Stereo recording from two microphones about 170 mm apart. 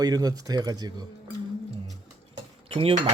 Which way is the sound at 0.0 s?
20° right (ahead or behind).